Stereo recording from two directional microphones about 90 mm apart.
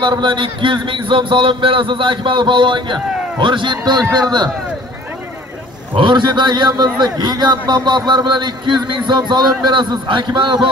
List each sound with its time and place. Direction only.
0.0 s a man's voice: 60° right (ahead or behind)
5.9 s a man's voice: 60° right (ahead or behind)